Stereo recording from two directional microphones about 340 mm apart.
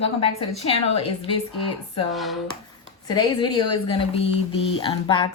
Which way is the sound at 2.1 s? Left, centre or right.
Centre.